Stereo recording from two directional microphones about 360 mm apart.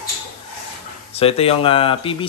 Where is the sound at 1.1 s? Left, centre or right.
Centre.